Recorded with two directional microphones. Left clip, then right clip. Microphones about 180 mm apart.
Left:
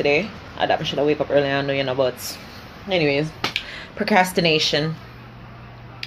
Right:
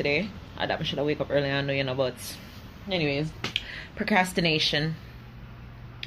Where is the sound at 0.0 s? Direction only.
5° left (ahead or behind).